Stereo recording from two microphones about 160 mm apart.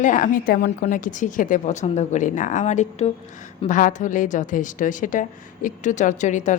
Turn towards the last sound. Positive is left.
turn(degrees=50)  # may be behind; listen again after turning